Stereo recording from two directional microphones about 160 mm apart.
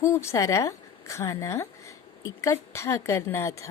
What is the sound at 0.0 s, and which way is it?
Speech, 15° left (ahead or behind).